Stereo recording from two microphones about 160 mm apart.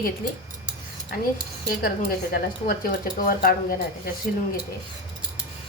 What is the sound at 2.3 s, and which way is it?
A woman's voice, 65° left (ahead or behind).